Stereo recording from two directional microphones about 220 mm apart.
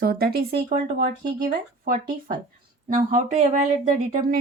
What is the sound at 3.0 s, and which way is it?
Speech, 35° right (ahead or behind).